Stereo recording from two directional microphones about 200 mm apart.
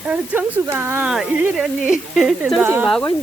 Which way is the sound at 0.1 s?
10° right (ahead or behind).